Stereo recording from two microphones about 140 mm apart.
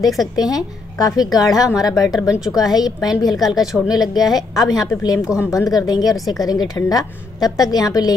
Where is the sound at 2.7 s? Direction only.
30° left (ahead or behind).